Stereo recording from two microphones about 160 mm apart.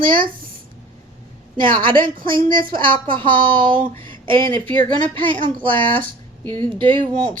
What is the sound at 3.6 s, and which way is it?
Speech, 55° right (ahead or behind).